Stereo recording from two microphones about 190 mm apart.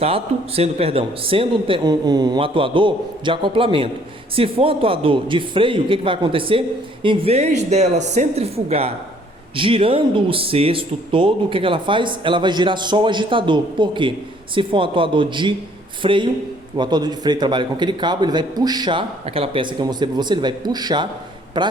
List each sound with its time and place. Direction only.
0.0 s speech: 30° right (ahead or behind)